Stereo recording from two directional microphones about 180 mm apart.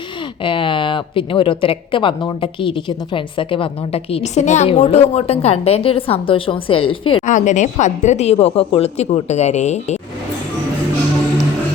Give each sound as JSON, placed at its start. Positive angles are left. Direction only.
{"t": 0.4, "sound": "speech", "side_deg": 30}
{"t": 7.3, "sound": "speech", "side_deg": 40}